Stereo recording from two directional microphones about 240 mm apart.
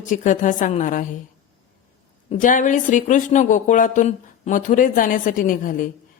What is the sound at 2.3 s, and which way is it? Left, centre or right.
A woman's voice, left.